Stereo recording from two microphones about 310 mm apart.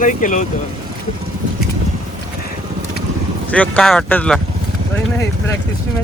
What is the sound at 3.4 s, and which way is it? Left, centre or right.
Speech, centre.